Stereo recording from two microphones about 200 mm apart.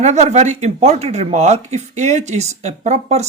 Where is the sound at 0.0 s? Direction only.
35° right (ahead or behind).